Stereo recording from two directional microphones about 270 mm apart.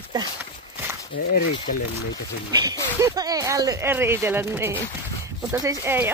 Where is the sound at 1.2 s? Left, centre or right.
Left.